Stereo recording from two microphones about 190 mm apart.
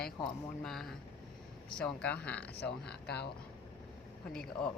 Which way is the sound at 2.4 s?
60° left (ahead or behind).